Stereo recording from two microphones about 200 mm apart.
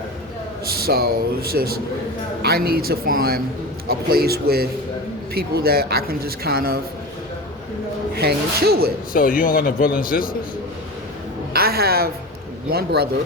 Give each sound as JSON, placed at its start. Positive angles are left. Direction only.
{"t": 0.6, "sound": "speech", "side_deg": -50}
{"t": 8.1, "sound": "speech", "side_deg": -55}
{"t": 9.1, "sound": "a man's voice", "side_deg": 45}
{"t": 11.5, "sound": "a woman's voice", "side_deg": -50}